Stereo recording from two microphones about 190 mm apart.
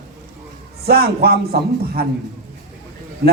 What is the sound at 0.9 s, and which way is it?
A man's voice, 55° right (ahead or behind).